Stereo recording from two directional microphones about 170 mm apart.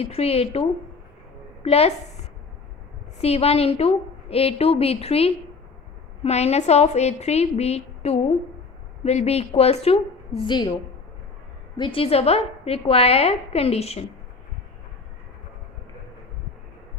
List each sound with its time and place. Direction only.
0.0 s a woman's voice: 35° left (ahead or behind)
3.2 s a woman's voice: 35° left (ahead or behind)
11.8 s a woman's voice: 30° left (ahead or behind)